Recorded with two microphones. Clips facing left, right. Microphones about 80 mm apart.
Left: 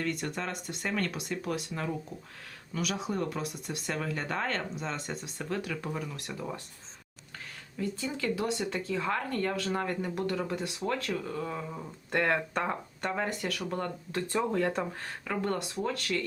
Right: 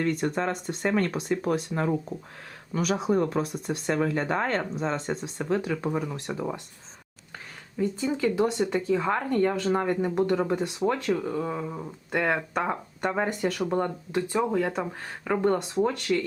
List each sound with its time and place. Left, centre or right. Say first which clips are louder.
0.0 s speech: right 7 dB; right
7.8 s speech: right 7 dB; centre